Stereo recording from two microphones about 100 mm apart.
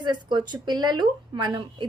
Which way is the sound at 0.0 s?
50° right (ahead or behind).